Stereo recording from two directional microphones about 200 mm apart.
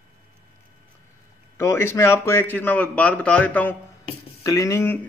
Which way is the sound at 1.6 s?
15° left (ahead or behind).